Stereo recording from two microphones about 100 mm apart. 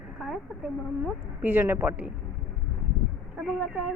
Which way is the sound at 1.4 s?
20° right (ahead or behind).